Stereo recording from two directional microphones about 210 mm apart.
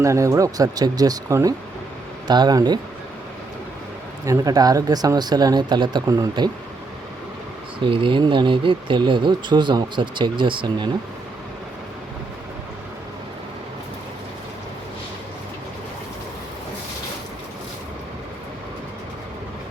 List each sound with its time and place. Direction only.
0.0 s speech: 15° right (ahead or behind)
4.3 s speech: 15° right (ahead or behind)
7.9 s speech: 25° right (ahead or behind)